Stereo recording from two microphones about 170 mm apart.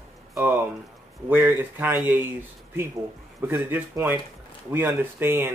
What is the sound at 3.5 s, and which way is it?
Speech, 10° right (ahead or behind).